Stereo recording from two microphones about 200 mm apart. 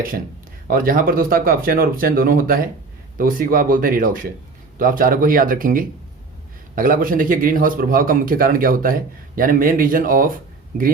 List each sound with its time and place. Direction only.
0.7 s a man's voice: 45° right (ahead or behind)